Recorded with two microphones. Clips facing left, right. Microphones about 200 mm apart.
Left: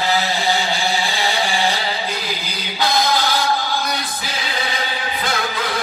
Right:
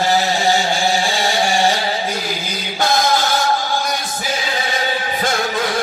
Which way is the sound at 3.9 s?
50° right (ahead or behind).